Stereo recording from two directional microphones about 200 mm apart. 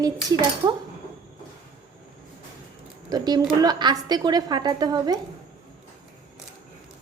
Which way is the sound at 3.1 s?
20° right (ahead or behind).